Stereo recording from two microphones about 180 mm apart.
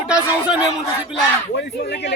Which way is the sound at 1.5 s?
70° left (ahead or behind).